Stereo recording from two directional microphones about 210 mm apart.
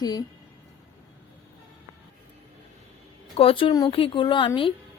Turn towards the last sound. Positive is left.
turn(degrees=25)  # may be behind; listen again after turning